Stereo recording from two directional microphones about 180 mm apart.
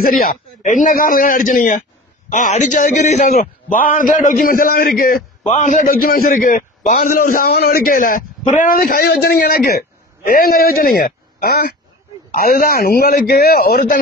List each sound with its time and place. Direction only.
0.0 s a man's voice: 55° left (ahead or behind)
5.5 s a man's voice: 45° left (ahead or behind)